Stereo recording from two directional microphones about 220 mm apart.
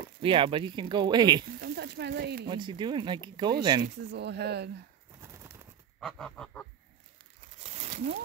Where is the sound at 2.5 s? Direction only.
20° right (ahead or behind).